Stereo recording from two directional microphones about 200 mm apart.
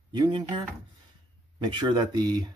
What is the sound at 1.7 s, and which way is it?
Speech, 25° right (ahead or behind).